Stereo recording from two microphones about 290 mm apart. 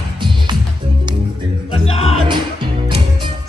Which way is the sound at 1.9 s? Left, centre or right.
Left.